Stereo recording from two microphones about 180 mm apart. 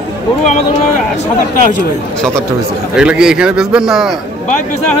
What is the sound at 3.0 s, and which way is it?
A man's voice, 5° right (ahead or behind).